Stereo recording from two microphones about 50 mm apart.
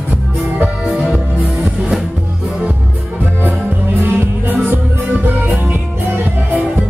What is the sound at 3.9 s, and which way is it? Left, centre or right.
Music, right.